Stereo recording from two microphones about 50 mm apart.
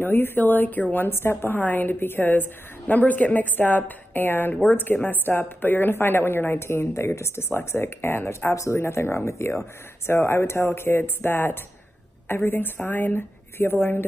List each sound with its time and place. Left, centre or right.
0.0 s a woman's voice: left
1.0 s a woman's voice: left
1.5 s a woman's voice: left
6.7 s speech: left
8.5 s a woman's voice: left